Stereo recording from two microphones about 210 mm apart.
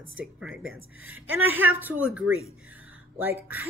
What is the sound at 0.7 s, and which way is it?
Speech, 75° right (ahead or behind).